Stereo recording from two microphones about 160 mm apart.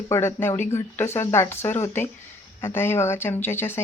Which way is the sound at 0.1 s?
15° left (ahead or behind).